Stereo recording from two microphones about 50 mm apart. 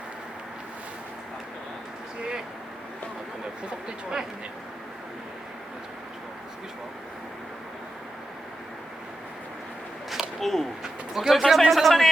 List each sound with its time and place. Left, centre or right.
3.7 s speech: centre
10.1 s a sound: centre
10.8 s speech: centre